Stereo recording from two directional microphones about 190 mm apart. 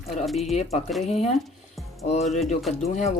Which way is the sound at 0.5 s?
35° left (ahead or behind).